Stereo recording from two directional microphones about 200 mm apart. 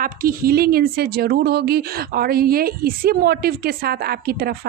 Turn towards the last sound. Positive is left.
turn(degrees=-50)  # may be behind; listen again after turning